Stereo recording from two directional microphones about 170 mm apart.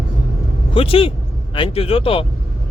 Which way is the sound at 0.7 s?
35° left (ahead or behind).